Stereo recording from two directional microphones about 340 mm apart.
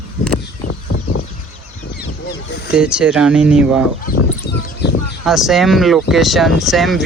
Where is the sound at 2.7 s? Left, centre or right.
Centre.